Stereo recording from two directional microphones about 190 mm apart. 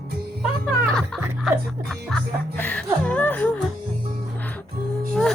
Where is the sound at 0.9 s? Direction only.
Centre (ahead or behind).